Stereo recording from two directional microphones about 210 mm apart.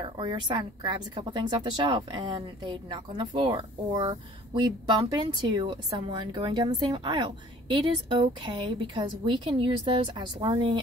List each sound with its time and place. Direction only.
0.0 s a woman's voice: 20° right (ahead or behind)